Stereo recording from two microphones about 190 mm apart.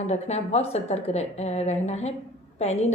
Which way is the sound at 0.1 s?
35° left (ahead or behind).